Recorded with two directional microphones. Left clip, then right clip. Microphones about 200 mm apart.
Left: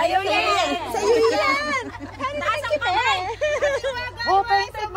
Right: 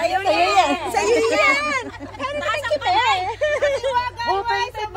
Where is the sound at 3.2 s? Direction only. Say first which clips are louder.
Right 2 dB; 45° right (ahead or behind).